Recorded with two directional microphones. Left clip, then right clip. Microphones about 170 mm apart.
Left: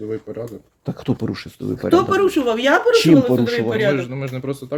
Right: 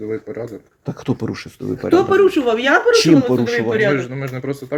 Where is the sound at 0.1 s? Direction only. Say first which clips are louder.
Right 2 dB; 20° left (ahead or behind).